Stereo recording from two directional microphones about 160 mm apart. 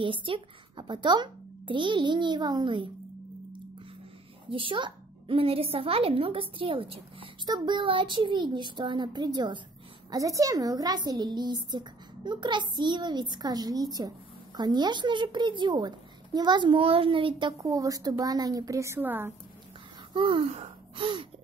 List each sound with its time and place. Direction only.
0.0 s a woman's voice: 30° right (ahead or behind)
4.5 s a woman's voice: 30° right (ahead or behind); by 19.3 s 10° right (ahead or behind)
20.2 s speech: 30° right (ahead or behind)